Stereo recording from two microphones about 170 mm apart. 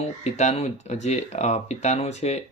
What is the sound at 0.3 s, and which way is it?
Speech, 40° left (ahead or behind).